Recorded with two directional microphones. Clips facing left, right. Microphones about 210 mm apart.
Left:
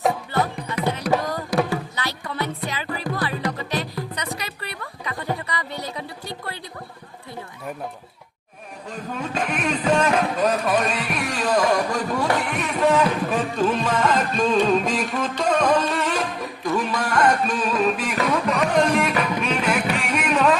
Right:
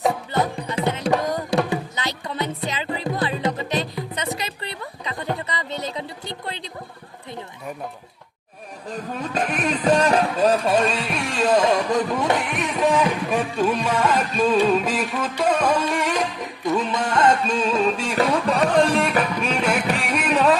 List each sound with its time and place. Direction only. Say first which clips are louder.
0.3 s music: right 1 dB; 20° right (ahead or behind)
5.4 s a sound: right 2 dB; 20° right (ahead or behind)
8.9 s music: right 1 dB; 35° right (ahead or behind)